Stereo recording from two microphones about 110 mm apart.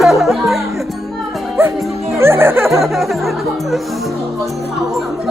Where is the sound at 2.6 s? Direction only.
Centre (ahead or behind).